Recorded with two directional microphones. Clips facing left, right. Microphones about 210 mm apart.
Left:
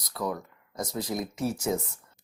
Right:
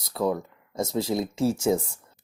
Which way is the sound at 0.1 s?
30° right (ahead or behind).